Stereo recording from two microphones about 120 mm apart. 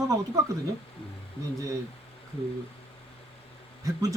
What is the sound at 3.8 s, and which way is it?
Speech, 30° right (ahead or behind).